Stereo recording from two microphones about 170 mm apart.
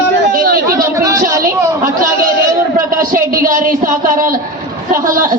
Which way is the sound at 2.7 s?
55° right (ahead or behind).